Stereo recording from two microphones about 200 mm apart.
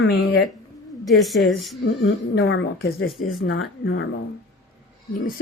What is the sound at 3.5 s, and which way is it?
Speech, 90° left.